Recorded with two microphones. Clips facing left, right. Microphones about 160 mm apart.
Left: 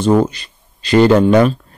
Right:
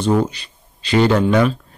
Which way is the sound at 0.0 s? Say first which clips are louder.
Left 4 dB; 45° left (ahead or behind).